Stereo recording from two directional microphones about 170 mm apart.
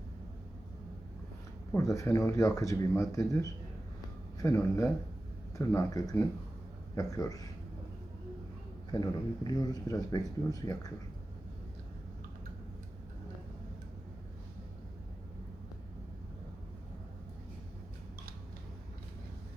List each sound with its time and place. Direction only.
1.7 s speech: 20° left (ahead or behind)
8.9 s speech: 25° left (ahead or behind)